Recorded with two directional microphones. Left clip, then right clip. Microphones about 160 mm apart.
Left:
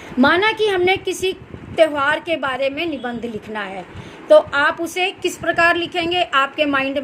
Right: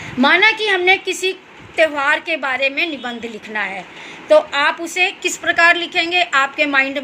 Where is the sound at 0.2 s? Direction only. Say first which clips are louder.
Right 2 dB; 50° left (ahead or behind).